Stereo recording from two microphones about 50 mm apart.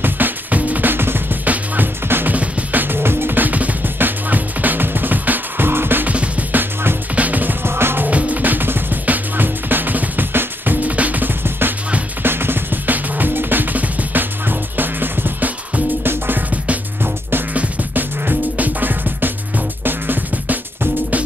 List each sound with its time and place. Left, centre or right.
0.0 s music: right
1.4 s music: right
2.0 s music: right
6.0 s music: right
7.6 s music: right
8.1 s music: right
17.6 s music: right